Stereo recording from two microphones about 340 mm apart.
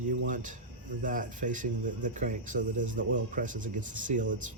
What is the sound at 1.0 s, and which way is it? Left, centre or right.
Speech, right.